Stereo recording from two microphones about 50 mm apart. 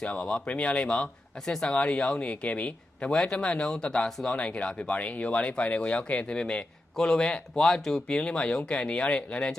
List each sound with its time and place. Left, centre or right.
0.0 s speech: centre
4.4 s speech: left
8.0 s speech: left